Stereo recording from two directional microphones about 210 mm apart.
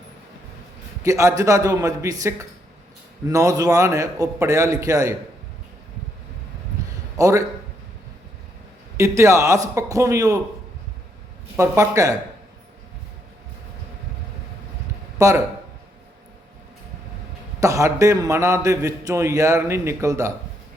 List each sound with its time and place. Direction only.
1.0 s a man's voice: 15° right (ahead or behind)
7.2 s a man's voice: 15° right (ahead or behind)
9.0 s a man's voice: 15° right (ahead or behind)
11.5 s a man's voice: 15° right (ahead or behind)
15.2 s a man's voice: 15° right (ahead or behind)
17.6 s a man's voice: 15° right (ahead or behind)